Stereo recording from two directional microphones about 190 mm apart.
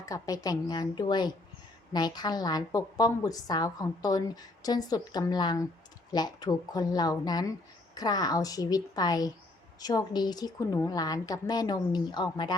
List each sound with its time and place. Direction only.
0.0 s a woman's voice: 20° left (ahead or behind)